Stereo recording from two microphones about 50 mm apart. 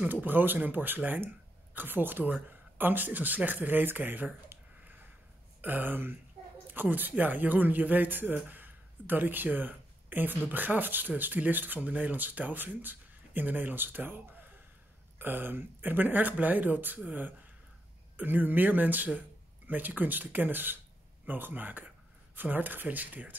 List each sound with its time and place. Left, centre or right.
0.1 s speech: right
5.6 s speech: right